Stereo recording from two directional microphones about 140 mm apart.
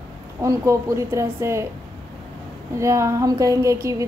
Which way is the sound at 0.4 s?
20° right (ahead or behind).